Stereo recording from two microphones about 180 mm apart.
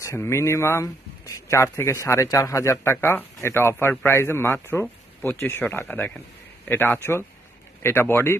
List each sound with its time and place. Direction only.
0.0 s a man's voice: 15° left (ahead or behind)